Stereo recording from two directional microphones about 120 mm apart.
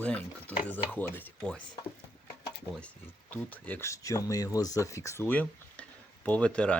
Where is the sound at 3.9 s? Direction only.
25° left (ahead or behind); by 6.8 s 10° left (ahead or behind).